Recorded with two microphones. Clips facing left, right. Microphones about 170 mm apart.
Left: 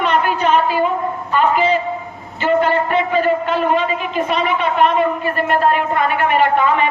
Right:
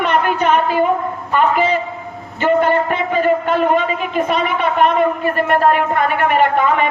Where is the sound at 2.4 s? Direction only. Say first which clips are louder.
Right 1 dB; 50° right (ahead or behind).